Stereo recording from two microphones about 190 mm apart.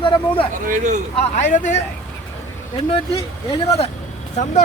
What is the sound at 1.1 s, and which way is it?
Speech, 35° left (ahead or behind).